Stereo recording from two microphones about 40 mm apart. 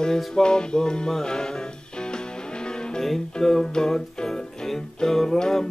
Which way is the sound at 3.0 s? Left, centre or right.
Centre.